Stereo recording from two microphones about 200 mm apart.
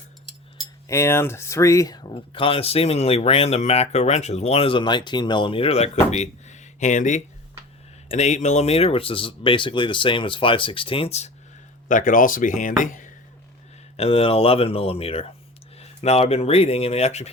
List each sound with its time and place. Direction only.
0.9 s speech: 15° left (ahead or behind); by 11.3 s 30° left (ahead or behind)
11.9 s speech: 40° left (ahead or behind)
13.9 s speech: 30° left (ahead or behind)